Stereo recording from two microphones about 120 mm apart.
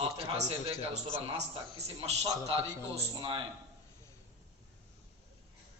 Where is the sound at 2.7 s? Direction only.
40° right (ahead or behind).